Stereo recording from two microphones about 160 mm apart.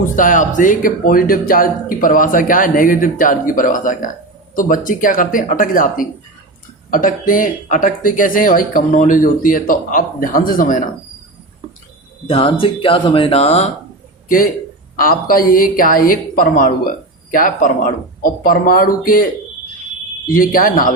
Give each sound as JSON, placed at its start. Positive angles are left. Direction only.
{"t": 0.2, "sound": "speech", "side_deg": 55}
{"t": 12.3, "sound": "speech", "side_deg": 35}
{"t": 14.3, "sound": "speech", "side_deg": 60}